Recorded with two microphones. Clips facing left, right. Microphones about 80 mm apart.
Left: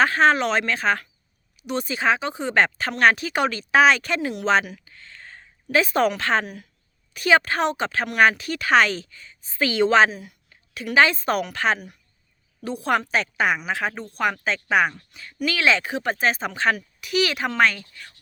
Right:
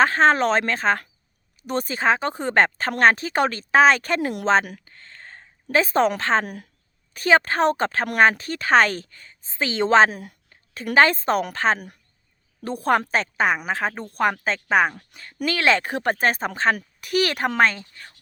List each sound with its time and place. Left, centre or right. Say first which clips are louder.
0.0 s speech: right 1 dB; right
4.6 s a sound: even; right
5.7 s speech: right 1 dB; right
6.4 s speech: right 2 dB; right
7.1 s speech: right 1 dB; right
9.5 s a woman's voice: even; right
10.1 s speech: right 1 dB; right
14.9 s speech: even; right
17.6 s speech: even; right